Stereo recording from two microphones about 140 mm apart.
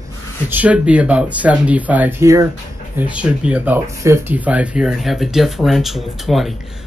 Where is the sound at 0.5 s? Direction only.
10° right (ahead or behind).